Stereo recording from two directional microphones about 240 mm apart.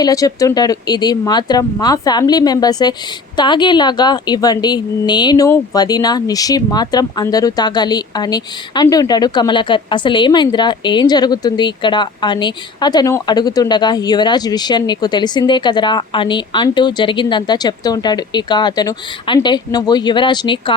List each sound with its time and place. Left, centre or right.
0.0 s a woman's voice: centre